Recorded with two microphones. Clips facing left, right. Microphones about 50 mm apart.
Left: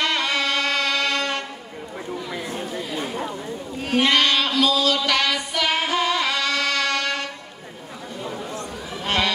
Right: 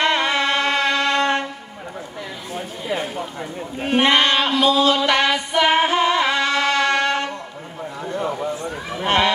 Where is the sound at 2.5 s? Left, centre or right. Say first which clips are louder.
Right 7 dB; right.